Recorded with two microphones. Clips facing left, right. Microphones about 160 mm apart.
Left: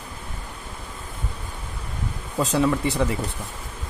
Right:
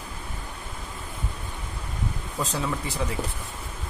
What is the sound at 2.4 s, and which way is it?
Speech, 70° left (ahead or behind).